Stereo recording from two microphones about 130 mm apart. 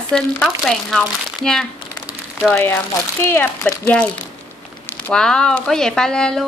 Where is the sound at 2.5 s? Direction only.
15° left (ahead or behind).